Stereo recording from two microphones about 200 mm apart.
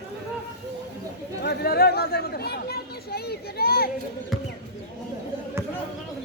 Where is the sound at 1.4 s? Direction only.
50° left (ahead or behind).